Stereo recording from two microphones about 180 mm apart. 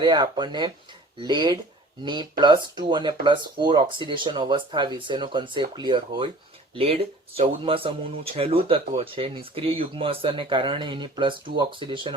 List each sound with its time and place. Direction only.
0.0 s speech: 25° right (ahead or behind)